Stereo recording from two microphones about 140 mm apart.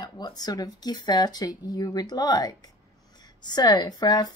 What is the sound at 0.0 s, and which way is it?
Speech, 30° left (ahead or behind).